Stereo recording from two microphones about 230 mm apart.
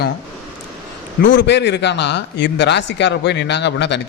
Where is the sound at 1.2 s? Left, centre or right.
Left.